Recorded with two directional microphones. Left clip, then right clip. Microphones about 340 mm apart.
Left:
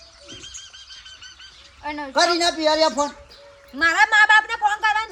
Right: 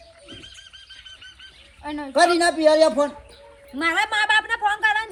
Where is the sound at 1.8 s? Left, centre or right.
Centre.